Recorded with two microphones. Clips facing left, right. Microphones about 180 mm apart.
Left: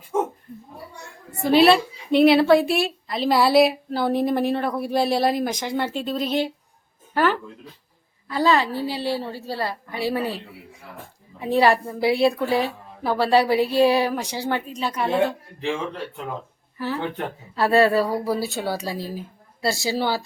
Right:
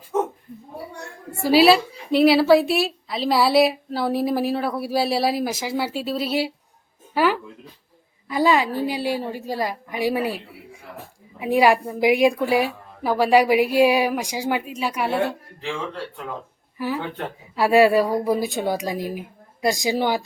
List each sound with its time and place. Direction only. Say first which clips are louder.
1.4 s a woman's voice: right 1 dB; 5° right (ahead or behind)
16.7 s a woman's voice: even; 10° right (ahead or behind)